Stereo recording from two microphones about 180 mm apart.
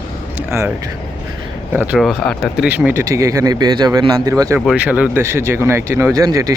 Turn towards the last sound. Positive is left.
turn(degrees=-20)  # may be behind; listen again after turning